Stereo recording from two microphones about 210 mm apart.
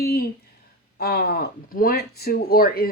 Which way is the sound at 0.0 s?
50° left (ahead or behind).